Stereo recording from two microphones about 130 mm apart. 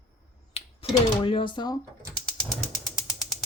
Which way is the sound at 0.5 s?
45° left (ahead or behind).